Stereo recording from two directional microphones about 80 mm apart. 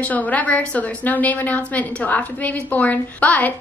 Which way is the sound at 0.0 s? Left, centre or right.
Centre.